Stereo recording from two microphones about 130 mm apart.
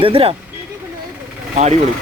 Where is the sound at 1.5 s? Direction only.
60° right (ahead or behind).